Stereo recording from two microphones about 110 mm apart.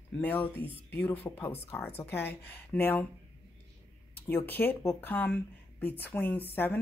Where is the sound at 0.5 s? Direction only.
55° right (ahead or behind).